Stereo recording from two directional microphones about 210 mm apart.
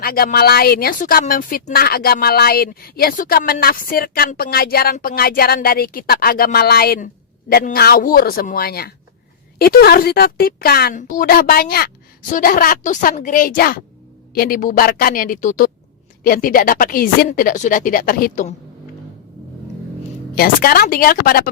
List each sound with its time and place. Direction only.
0.0 s speech: 45° left (ahead or behind)
20.3 s speech: 45° left (ahead or behind)